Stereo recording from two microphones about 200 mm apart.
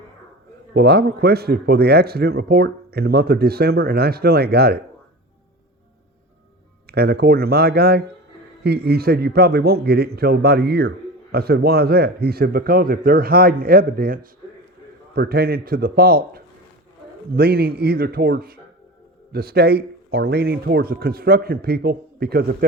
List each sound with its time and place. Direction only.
0.7 s a man's voice: 55° right (ahead or behind)
6.8 s a man's voice: 50° right (ahead or behind)